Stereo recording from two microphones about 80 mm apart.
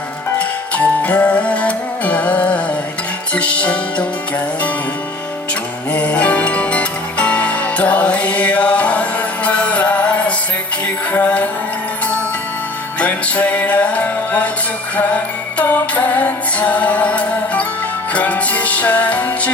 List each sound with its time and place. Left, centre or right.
0.3 s music: centre
5.9 s music: centre
13.0 s music: centre